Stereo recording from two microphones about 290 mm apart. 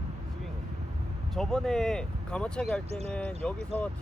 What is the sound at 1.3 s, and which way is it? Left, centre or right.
Speech, centre.